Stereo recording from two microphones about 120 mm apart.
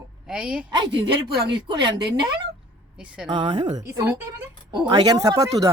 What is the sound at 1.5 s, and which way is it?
Speech, 40° right (ahead or behind).